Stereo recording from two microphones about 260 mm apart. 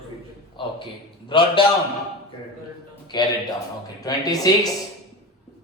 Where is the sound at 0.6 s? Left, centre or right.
Centre.